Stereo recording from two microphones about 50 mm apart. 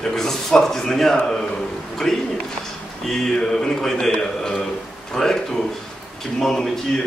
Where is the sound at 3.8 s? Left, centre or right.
Centre.